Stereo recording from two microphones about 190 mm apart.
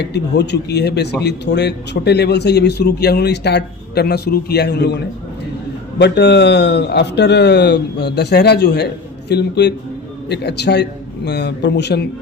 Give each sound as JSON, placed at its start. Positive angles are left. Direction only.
{"t": 0.0, "sound": "a man's voice", "side_deg": 60}
{"t": 6.0, "sound": "a man's voice", "side_deg": 65}